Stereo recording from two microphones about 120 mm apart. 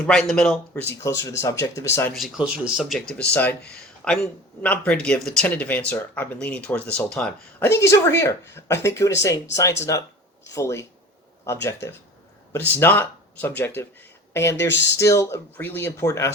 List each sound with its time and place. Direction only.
0.0 s speech: 5° left (ahead or behind)
1.0 s speech: 25° left (ahead or behind)
2.1 s speech: 5° right (ahead or behind)
3.1 s speech: 10° left (ahead or behind)
7.6 s speech: 25° left (ahead or behind)